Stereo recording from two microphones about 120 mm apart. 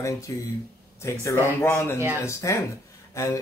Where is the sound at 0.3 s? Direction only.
30° left (ahead or behind).